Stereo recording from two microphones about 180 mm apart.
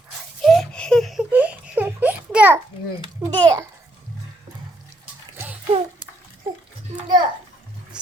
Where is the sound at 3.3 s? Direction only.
25° right (ahead or behind).